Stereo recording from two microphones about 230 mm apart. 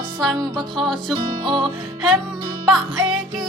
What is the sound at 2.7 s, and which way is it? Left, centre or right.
Music, centre.